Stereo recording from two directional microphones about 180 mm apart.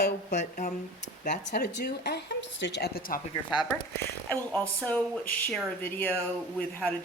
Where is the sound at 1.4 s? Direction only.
65° left (ahead or behind).